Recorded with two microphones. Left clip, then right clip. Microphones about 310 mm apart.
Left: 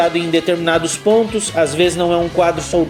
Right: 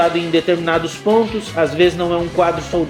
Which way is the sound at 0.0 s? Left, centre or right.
Left.